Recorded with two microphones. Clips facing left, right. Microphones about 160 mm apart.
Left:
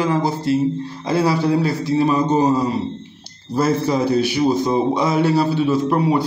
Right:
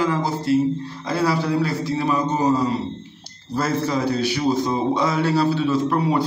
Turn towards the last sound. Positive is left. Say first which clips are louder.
# left 3 dB
turn(degrees=15)  # may be behind; listen again after turning